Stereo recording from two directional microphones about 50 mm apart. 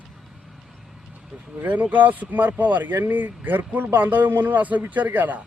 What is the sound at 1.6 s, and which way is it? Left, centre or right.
A man's voice, right.